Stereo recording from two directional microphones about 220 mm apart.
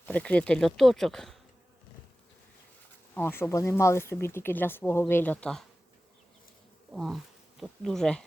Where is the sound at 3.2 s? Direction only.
10° left (ahead or behind).